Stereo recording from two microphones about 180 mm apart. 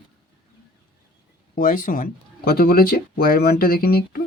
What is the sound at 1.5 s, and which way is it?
Speech, 50° left (ahead or behind).